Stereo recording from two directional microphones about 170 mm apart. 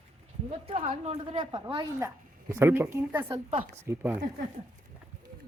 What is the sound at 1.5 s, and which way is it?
Speech, 25° right (ahead or behind).